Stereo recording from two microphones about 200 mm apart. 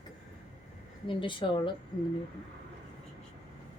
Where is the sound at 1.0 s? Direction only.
25° left (ahead or behind).